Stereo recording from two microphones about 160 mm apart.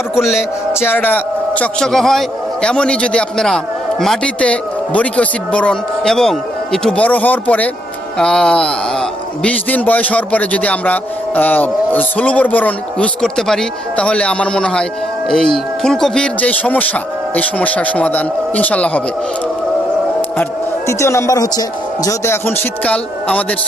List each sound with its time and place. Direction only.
0.2 s music: 5° right (ahead or behind)
0.7 s a man's voice: 15° left (ahead or behind)
20.4 s a man's voice: 20° left (ahead or behind)